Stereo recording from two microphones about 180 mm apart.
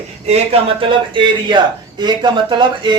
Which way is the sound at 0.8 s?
25° right (ahead or behind).